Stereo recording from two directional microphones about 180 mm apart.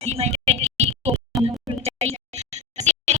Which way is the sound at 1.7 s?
35° right (ahead or behind).